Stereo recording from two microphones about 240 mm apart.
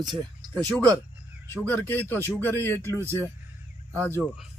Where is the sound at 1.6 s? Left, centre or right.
Centre.